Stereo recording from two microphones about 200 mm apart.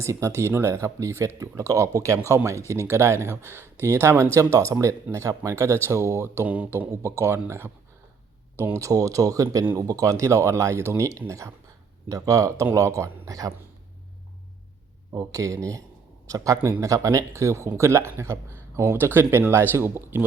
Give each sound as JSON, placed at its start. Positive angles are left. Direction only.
{"t": 0.0, "sound": "speech", "side_deg": -15}
{"t": 15.1, "sound": "speech", "side_deg": -15}